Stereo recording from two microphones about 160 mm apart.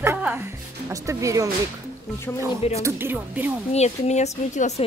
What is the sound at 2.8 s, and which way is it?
Speech, 15° right (ahead or behind).